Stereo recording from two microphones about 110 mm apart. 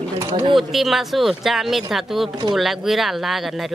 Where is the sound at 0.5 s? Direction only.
Centre (ahead or behind).